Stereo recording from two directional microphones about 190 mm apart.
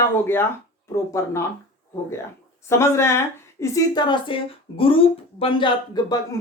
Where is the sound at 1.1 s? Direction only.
15° left (ahead or behind).